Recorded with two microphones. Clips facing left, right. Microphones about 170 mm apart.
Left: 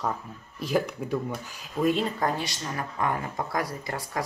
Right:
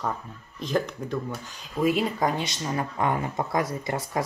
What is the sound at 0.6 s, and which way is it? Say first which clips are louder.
Speech: even; 5° left (ahead or behind).